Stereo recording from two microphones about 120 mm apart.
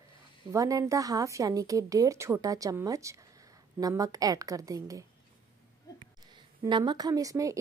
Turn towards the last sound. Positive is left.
turn(degrees=-25)  # may be behind; listen again after turning